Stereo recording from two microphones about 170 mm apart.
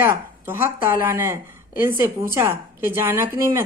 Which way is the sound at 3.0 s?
15° right (ahead or behind).